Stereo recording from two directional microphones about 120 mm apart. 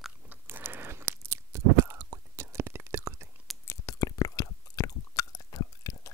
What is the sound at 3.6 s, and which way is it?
Chewing, 30° left (ahead or behind).